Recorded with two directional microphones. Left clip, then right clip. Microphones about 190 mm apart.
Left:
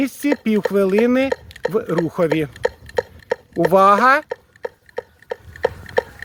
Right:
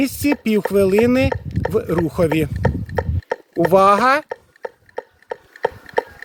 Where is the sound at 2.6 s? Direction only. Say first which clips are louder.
Left 1 dB; 60° left (ahead or behind).